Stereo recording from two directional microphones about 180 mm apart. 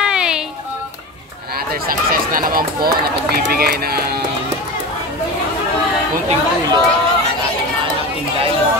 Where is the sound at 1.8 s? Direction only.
55° right (ahead or behind).